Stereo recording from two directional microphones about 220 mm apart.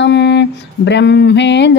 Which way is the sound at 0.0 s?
50° left (ahead or behind).